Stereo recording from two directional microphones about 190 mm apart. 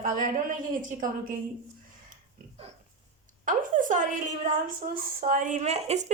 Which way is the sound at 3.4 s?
45° right (ahead or behind).